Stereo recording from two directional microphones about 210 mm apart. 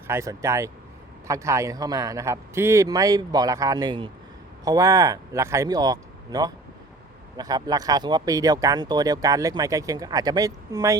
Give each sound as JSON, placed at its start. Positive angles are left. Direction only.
{"t": 0.1, "sound": "speech", "side_deg": -15}